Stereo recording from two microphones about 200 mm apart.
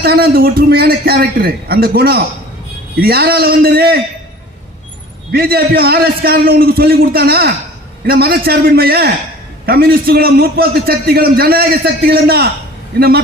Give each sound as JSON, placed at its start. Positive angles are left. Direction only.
{"t": 0.0, "sound": "a man's voice", "side_deg": -50}
{"t": 5.3, "sound": "a man's voice", "side_deg": -50}